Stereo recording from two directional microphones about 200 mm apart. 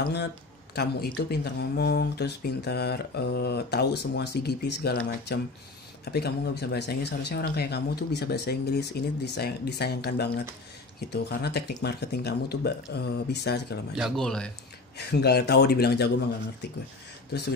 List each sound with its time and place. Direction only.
0.7 s speech: 50° left (ahead or behind)
13.9 s speech: centre (ahead or behind)
15.0 s speech: 55° left (ahead or behind)